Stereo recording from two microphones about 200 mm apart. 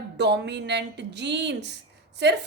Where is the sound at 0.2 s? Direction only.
60° right (ahead or behind).